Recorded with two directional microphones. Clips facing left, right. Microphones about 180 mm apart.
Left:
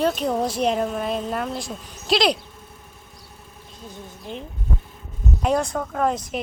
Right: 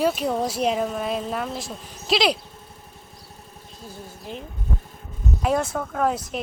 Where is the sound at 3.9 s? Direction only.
5° right (ahead or behind).